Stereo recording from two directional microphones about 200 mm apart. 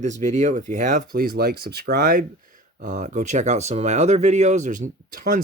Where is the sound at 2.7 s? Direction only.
40° right (ahead or behind).